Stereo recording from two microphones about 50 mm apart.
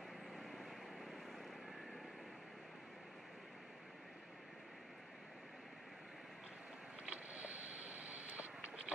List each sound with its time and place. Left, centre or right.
0.4 s vehicle: centre
7.1 s vehicle: right